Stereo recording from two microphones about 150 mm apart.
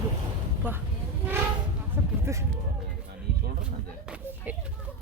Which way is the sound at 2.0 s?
15° right (ahead or behind).